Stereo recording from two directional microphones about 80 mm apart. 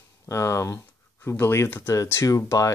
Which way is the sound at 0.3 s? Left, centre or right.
Left.